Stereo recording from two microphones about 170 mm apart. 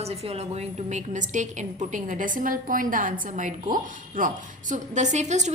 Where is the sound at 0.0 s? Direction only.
35° right (ahead or behind).